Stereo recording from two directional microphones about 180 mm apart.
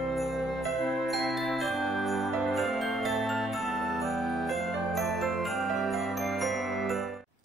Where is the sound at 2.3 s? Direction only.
Centre (ahead or behind).